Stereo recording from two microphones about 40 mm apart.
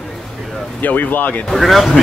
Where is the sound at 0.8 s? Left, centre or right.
Left.